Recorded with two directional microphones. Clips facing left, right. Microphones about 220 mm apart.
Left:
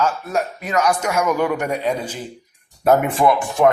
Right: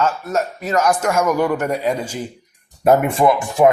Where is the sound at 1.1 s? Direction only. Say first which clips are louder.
Right 2 dB; 10° right (ahead or behind).